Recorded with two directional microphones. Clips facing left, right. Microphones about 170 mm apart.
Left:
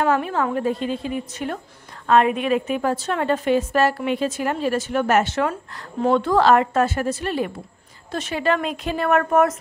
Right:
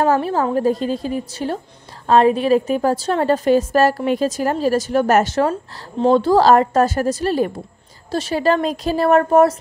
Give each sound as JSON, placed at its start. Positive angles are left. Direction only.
{"t": 0.0, "sound": "a woman's voice", "side_deg": -35}
{"t": 5.5, "sound": "a woman's voice", "side_deg": -25}